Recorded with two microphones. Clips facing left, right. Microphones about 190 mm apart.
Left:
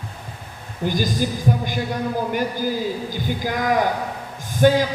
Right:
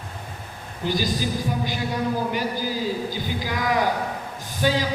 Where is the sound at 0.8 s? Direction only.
50° left (ahead or behind).